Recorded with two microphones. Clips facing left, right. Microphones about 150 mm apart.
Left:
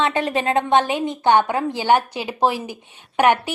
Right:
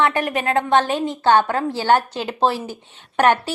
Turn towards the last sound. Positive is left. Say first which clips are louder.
# even
turn(degrees=10)  # may be behind; listen again after turning